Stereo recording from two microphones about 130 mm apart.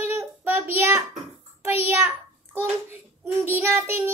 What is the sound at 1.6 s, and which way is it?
Child singing, 20° right (ahead or behind).